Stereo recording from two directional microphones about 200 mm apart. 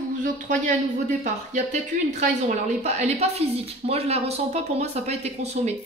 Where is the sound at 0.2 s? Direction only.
40° right (ahead or behind).